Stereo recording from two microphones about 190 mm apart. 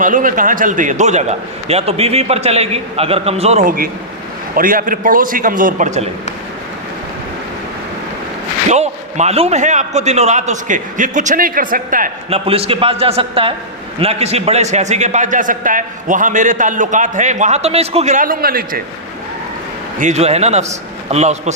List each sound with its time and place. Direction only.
0.0 s a man's voice: 45° right (ahead or behind)
8.7 s a man's voice: 35° right (ahead or behind)
12.3 s a man's voice: 30° right (ahead or behind); by 18.8 s 50° right (ahead or behind)
20.0 s a man's voice: 35° right (ahead or behind)